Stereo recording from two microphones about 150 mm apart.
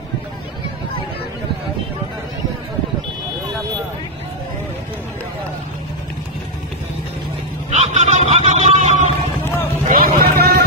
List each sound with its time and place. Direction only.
7.7 s fowl: 50° right (ahead or behind)
8.5 s a sound: 50° right (ahead or behind)
9.4 s vehicle: 15° left (ahead or behind)
9.8 s vehicle: 80° right